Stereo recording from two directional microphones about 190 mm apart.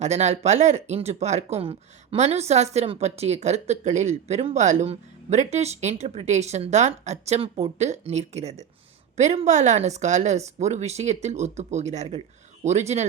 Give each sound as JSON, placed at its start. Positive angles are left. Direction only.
{"t": 0.0, "sound": "speech", "side_deg": -35}